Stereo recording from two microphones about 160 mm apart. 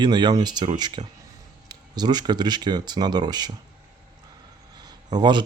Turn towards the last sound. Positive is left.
turn(degrees=-30)  # may be behind; listen again after turning